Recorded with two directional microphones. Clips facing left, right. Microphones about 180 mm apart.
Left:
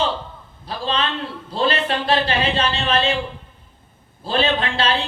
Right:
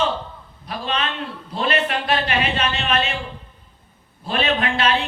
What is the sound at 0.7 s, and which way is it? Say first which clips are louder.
A man's voice: left 2 dB; 30° left (ahead or behind).